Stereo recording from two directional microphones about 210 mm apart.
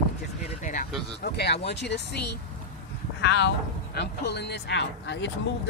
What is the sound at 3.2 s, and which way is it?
Speech, 55° left (ahead or behind).